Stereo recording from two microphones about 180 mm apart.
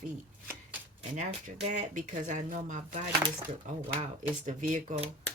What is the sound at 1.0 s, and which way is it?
Speech, 40° right (ahead or behind).